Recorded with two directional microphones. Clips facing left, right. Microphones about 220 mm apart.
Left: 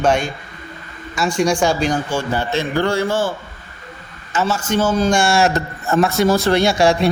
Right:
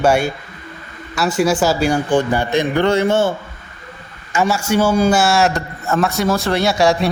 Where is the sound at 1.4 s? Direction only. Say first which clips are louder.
Right 1 dB; 5° right (ahead or behind); by 3.3 s 25° right (ahead or behind).